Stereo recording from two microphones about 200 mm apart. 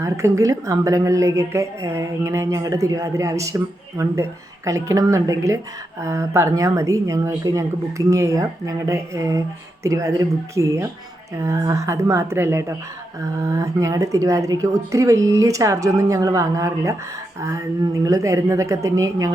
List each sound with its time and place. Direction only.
0.0 s a woman's voice: 15° right (ahead or behind)